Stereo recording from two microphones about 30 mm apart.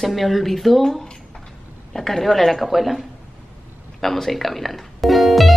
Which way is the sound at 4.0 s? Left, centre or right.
Centre.